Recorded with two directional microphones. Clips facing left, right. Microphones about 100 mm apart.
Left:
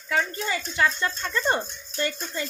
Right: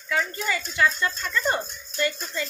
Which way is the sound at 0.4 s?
25° left (ahead or behind).